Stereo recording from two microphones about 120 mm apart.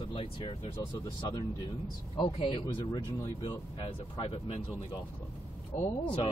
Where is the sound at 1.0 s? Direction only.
35° left (ahead or behind).